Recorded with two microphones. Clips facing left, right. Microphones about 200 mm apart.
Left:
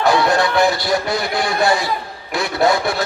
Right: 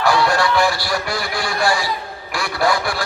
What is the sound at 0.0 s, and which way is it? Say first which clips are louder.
A man's voice: left 2 dB; 20° left (ahead or behind).